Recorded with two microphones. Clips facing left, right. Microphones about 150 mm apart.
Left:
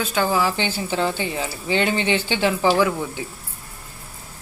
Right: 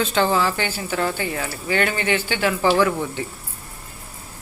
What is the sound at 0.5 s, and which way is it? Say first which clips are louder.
Speech: left 1 dB; 20° left (ahead or behind).